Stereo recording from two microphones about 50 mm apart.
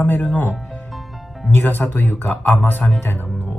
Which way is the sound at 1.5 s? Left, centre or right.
Left.